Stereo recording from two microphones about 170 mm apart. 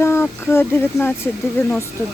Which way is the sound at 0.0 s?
15° left (ahead or behind).